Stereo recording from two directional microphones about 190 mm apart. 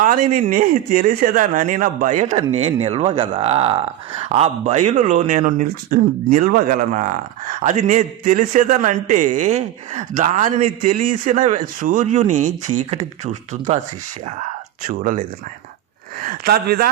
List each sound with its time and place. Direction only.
0.0 s speech: 45° right (ahead or behind)
14.8 s speech: 45° right (ahead or behind)
16.2 s speech: 55° right (ahead or behind)